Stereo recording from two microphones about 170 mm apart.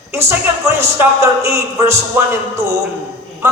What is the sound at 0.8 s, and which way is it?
A man's voice, 15° right (ahead or behind).